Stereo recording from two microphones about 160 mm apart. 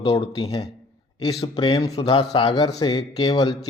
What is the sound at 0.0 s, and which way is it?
A man's voice, 30° left (ahead or behind).